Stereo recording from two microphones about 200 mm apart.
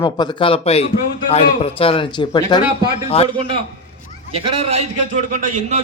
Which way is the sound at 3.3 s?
30° right (ahead or behind).